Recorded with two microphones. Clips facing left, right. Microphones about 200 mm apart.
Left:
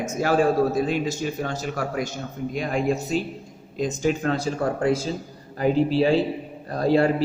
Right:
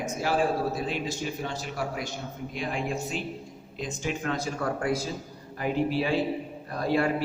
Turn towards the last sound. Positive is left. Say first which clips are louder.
# left 6 dB
turn(degrees=30)  # may be behind; listen again after turning